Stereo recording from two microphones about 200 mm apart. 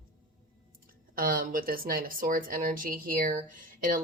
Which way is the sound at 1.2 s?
45° right (ahead or behind).